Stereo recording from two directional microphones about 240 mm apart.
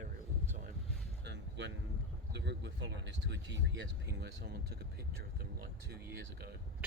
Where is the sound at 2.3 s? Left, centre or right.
Right.